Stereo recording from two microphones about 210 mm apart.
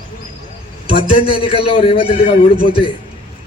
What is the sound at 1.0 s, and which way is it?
A man's voice, 25° left (ahead or behind).